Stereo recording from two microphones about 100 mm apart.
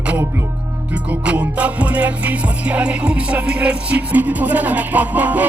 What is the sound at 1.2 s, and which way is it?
Music, 15° right (ahead or behind).